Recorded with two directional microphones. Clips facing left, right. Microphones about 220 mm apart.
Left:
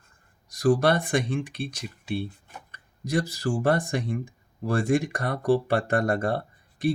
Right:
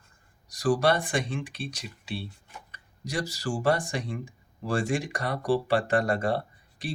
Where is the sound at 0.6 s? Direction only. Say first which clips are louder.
Left 3 dB; 55° left (ahead or behind).